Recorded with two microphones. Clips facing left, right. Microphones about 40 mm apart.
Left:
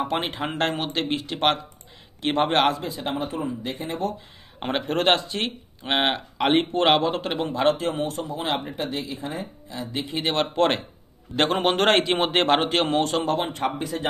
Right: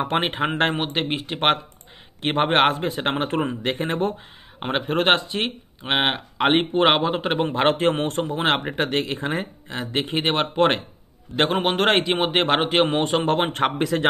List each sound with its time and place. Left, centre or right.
0.0 s speech: right
4.6 s speech: centre
7.4 s speech: right
10.1 s speech: right
11.3 s speech: centre
12.8 s speech: right
13.5 s a man's voice: right